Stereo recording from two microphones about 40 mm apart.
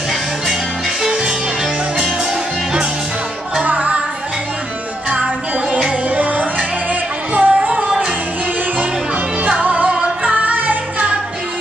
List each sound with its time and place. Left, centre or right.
1.0 s music: centre
3.6 s music: right
6.0 s music: right
9.4 s music: right